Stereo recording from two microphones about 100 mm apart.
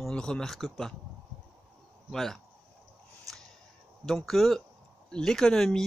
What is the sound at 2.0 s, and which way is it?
Speech, centre (ahead or behind).